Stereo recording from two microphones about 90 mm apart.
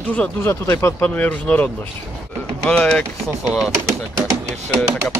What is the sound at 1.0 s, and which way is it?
Speech, 15° left (ahead or behind).